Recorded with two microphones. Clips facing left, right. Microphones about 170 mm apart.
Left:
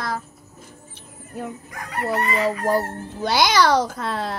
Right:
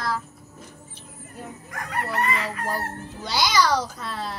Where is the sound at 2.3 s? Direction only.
45° left (ahead or behind).